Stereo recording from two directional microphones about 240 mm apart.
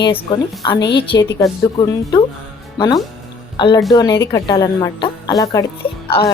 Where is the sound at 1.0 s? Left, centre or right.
Left.